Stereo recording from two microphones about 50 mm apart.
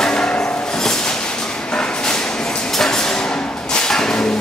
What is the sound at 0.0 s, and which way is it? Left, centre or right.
Music, centre.